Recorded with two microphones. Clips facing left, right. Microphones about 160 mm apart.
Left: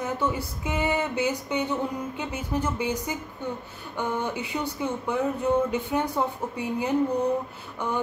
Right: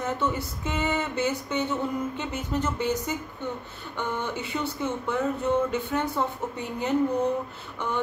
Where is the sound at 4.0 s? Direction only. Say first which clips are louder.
Left 2 dB; 10° left (ahead or behind).